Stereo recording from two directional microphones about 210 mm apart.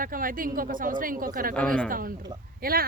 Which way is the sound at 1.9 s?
40° right (ahead or behind).